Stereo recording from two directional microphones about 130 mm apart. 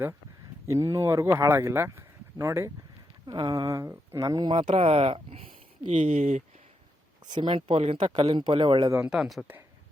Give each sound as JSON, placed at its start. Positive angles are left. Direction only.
{"t": 0.7, "sound": "speech", "side_deg": -25}
{"t": 3.2, "sound": "speech", "side_deg": -35}
{"t": 4.5, "sound": "speech", "side_deg": -50}
{"t": 5.9, "sound": "speech", "side_deg": -55}
{"t": 7.3, "sound": "speech", "side_deg": -40}
{"t": 9.0, "sound": "speech", "side_deg": -5}